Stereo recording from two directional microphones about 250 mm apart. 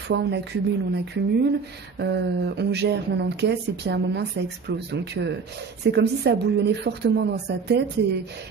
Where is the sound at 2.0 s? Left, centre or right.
Right.